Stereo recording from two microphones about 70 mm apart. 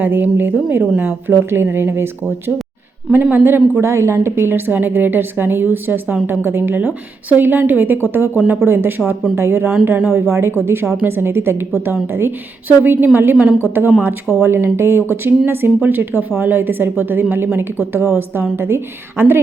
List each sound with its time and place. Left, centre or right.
0.0 s a woman's voice: right